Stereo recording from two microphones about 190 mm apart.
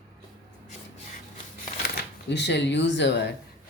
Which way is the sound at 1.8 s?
60° left (ahead or behind).